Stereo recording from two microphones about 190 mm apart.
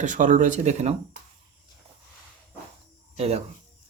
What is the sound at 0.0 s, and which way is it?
Speech, 40° right (ahead or behind).